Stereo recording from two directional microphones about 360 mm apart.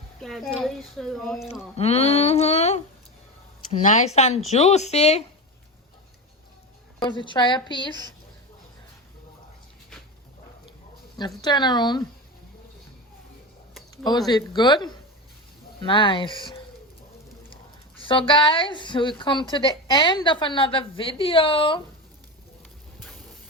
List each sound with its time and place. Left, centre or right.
0.2 s speech: centre
1.7 s a woman's voice: centre
7.0 s a woman's voice: centre
11.4 s a woman's voice: centre
14.3 s a woman's voice: centre
18.0 s a woman's voice: centre